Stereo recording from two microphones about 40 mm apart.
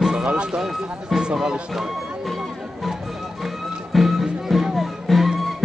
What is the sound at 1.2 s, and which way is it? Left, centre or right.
Speech, right.